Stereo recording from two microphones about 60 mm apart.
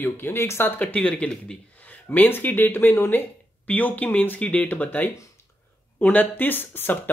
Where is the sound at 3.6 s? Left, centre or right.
Left.